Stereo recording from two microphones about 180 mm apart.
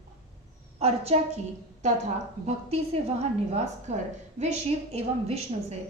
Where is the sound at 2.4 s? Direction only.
35° right (ahead or behind).